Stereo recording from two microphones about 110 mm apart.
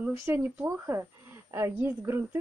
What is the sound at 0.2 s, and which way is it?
A woman's voice, 20° right (ahead or behind).